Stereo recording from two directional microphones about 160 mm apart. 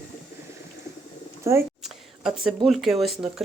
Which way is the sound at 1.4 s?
15° right (ahead or behind).